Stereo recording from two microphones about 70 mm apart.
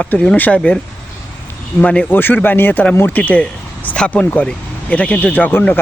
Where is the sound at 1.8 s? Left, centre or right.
Left.